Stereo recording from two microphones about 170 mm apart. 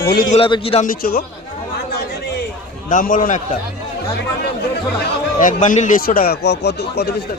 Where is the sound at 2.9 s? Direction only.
50° left (ahead or behind).